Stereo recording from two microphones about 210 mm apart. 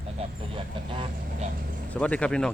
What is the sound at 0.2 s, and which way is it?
Vehicle, 25° right (ahead or behind).